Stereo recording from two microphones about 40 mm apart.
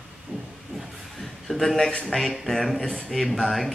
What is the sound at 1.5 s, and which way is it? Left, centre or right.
Speech, centre.